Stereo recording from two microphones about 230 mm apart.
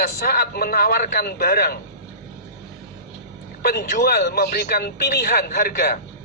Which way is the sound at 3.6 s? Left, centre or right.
Left.